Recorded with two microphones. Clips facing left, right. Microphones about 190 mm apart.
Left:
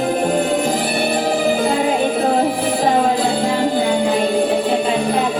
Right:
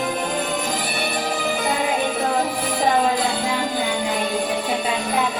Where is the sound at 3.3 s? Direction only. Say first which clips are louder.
Left 6 dB; 30° left (ahead or behind).